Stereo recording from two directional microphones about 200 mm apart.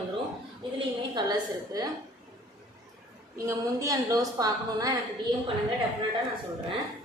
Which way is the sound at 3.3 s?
15° right (ahead or behind).